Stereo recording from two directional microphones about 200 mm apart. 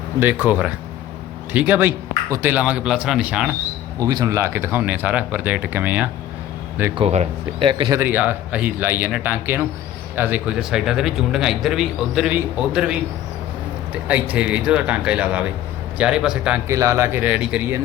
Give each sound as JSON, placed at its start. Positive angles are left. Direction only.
{"t": 0.2, "sound": "speech", "side_deg": -10}
{"t": 4.0, "sound": "speech", "side_deg": -20}
{"t": 6.9, "sound": "speech", "side_deg": -30}
{"t": 7.9, "sound": "speech", "side_deg": -10}